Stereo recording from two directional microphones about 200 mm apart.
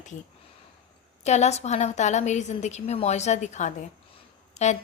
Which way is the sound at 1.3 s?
35° left (ahead or behind).